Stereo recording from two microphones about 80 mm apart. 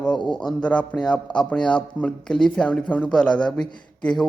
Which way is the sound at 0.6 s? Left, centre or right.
Centre.